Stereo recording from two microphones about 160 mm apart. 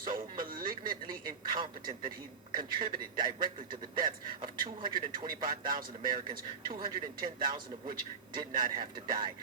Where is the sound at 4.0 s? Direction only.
60° right (ahead or behind).